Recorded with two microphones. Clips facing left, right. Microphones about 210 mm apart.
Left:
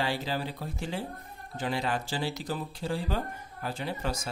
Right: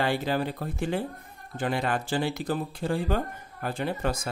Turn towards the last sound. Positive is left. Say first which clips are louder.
# right 4 dB
turn(degrees=-55)  # may be behind; listen again after turning